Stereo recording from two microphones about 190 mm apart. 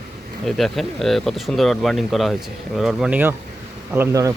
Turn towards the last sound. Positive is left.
turn(degrees=-15)  # may be behind; listen again after turning